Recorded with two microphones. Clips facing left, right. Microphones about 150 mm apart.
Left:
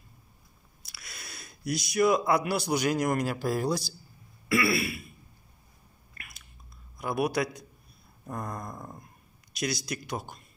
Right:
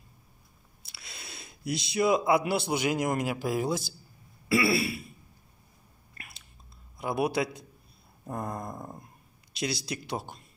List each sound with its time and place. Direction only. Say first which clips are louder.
0.8 s speech: even; 25° right (ahead or behind)
4.5 s throat clearing: right 1 dB; 30° right (ahead or behind)
6.1 s whispering: right 1 dB; 30° right (ahead or behind)
7.0 s speech: even; 25° right (ahead or behind)